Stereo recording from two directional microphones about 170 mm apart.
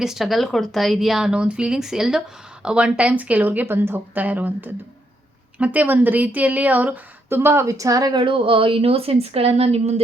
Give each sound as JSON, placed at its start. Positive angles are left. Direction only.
{"t": 0.0, "sound": "a woman's voice", "side_deg": 0}